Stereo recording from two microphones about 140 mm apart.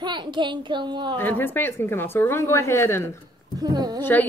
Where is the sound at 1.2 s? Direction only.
15° left (ahead or behind).